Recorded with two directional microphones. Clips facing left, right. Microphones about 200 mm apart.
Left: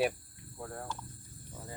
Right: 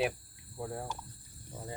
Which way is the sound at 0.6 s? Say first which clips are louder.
Right 3 dB; 15° right (ahead or behind).